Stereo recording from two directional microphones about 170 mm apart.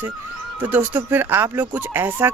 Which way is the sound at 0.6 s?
10° right (ahead or behind).